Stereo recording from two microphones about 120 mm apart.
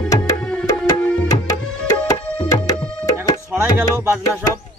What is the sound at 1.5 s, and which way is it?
Tabla, 30° left (ahead or behind).